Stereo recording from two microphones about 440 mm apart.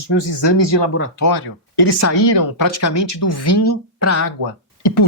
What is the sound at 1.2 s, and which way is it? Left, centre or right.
Speech, left.